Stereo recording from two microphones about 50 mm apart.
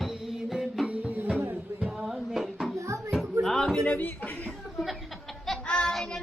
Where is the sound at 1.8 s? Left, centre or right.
Centre.